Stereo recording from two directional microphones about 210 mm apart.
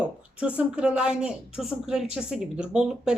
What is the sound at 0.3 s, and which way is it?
Speech, 5° right (ahead or behind).